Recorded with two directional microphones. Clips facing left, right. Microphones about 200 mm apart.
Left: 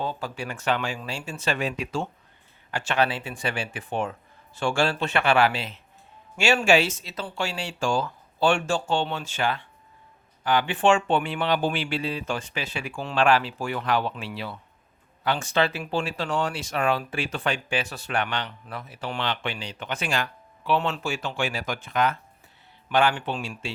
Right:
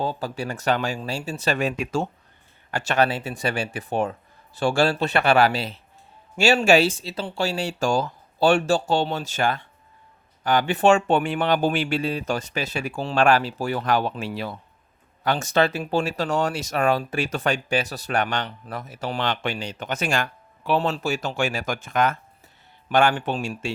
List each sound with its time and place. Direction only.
0.2 s speech: 40° right (ahead or behind)
20.7 s speech: 35° right (ahead or behind)